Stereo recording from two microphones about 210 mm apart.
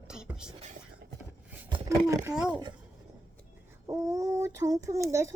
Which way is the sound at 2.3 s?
5° right (ahead or behind).